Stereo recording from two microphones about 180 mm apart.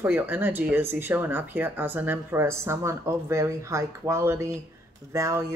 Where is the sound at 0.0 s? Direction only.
10° right (ahead or behind).